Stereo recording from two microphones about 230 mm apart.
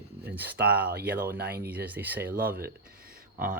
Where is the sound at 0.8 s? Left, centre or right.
Right.